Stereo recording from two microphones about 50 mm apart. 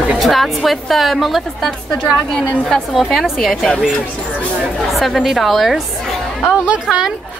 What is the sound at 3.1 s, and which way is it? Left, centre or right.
Speech, centre.